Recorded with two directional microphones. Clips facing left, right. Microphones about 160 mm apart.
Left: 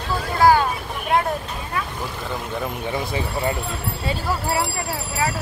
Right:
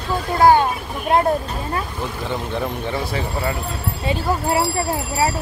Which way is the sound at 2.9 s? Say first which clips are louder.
Right 1 dB; 20° left (ahead or behind).